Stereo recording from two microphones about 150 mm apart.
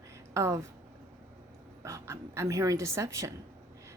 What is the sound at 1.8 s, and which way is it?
Speech, 20° right (ahead or behind).